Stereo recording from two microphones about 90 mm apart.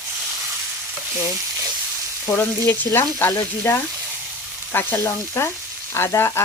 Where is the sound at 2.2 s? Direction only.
25° left (ahead or behind).